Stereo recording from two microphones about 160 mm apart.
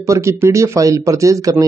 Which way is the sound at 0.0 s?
20° right (ahead or behind).